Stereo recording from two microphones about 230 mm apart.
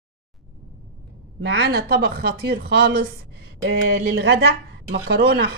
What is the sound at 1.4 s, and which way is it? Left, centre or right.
Speech, right.